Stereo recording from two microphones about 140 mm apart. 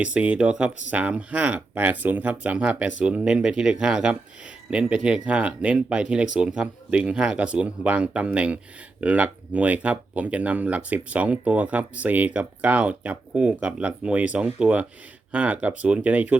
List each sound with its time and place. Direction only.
0.0 s speech: 10° right (ahead or behind)